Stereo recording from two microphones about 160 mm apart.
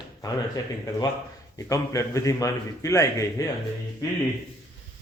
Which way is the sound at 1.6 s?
20° left (ahead or behind).